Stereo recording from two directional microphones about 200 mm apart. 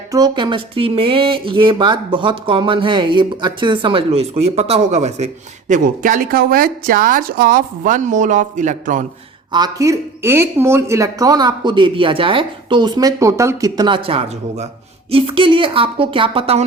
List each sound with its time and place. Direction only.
0.1 s speech: 20° right (ahead or behind); by 9.0 s 40° right (ahead or behind)
9.5 s speech: 20° right (ahead or behind)